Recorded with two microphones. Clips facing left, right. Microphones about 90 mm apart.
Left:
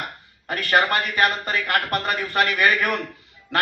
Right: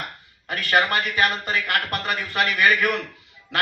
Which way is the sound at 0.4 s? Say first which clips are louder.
Left 1 dB; 45° left (ahead or behind).